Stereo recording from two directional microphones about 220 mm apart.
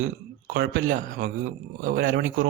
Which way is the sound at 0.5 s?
50° right (ahead or behind).